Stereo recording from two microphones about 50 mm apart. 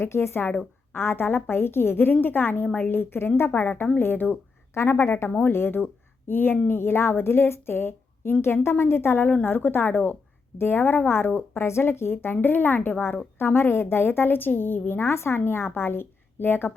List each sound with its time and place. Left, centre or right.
0.0 s a woman's voice: left
4.7 s a woman's voice: left
11.3 s speech: left
15.0 s a woman's voice: left